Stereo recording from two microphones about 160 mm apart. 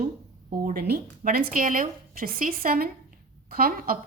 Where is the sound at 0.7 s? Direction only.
75° right (ahead or behind).